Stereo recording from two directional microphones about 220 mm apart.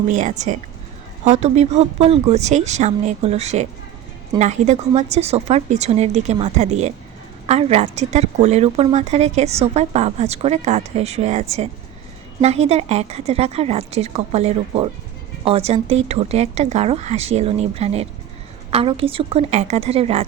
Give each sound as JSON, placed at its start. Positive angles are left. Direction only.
{"t": 0.1, "sound": "a woman's voice", "side_deg": -35}